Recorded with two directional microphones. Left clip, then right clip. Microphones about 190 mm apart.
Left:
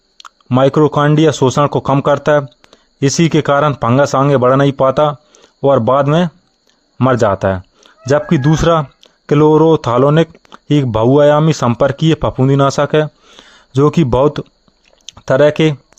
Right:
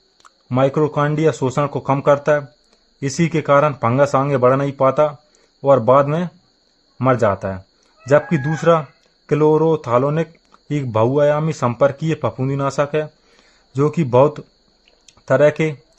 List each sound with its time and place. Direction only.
0.2 s speech: 35° left (ahead or behind)